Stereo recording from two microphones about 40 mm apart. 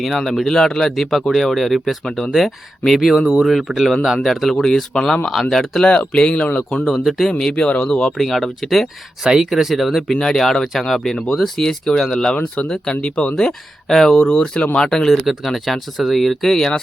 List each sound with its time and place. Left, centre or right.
0.2 s speech: centre
4.2 s speech: centre
4.6 s speech: centre
5.8 s speech: left
7.0 s speech: centre
7.3 s speech: centre
7.5 s speech: left
8.2 s speech: centre
9.2 s speech: centre
10.1 s speech: centre
12.3 s speech: left
13.3 s speech: centre
14.3 s speech: centre